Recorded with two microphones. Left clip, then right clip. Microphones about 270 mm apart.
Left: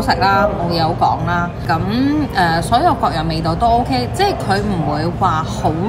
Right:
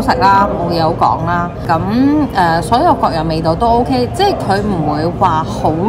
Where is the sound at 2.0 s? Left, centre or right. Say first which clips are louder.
Right 3 dB; centre.